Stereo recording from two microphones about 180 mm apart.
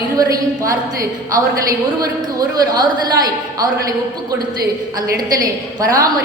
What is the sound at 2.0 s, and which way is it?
A woman's voice, 20° right (ahead or behind).